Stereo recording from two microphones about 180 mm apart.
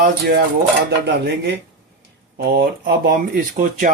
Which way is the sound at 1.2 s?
70° right (ahead or behind).